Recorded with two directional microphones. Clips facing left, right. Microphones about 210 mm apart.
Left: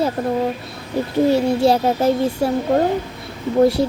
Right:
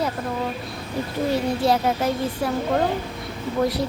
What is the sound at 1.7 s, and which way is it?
Speech, 30° left (ahead or behind).